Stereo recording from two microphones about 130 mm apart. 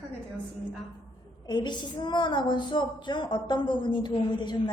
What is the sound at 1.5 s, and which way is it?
A woman's voice, 35° left (ahead or behind).